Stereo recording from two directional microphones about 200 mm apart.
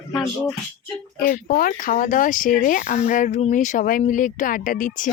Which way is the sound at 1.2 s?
45° left (ahead or behind).